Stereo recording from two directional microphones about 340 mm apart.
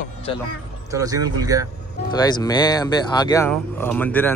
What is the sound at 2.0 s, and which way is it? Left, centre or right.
A man's voice, centre.